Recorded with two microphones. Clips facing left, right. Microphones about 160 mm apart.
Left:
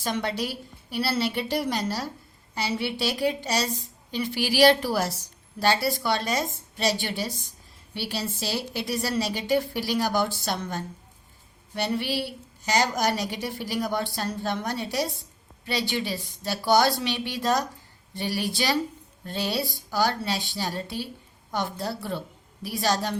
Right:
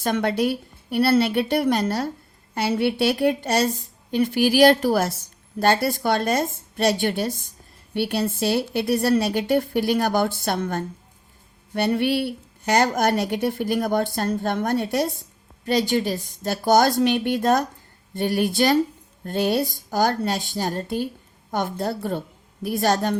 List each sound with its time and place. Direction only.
0.0 s a woman's voice: 55° right (ahead or behind)